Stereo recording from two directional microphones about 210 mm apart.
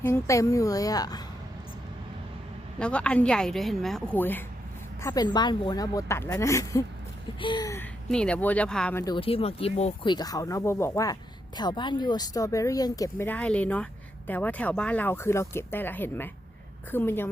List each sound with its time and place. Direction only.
0.0 s speech: 15° left (ahead or behind)
2.7 s a woman's voice: 5° left (ahead or behind)
8.1 s a woman's voice: 5° left (ahead or behind)
9.1 s speech: 25° left (ahead or behind); by 17.2 s 10° left (ahead or behind)